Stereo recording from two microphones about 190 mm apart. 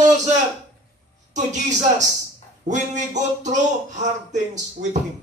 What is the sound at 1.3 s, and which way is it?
Speech, 40° right (ahead or behind).